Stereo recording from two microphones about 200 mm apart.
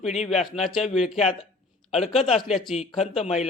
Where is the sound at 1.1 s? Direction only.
35° left (ahead or behind).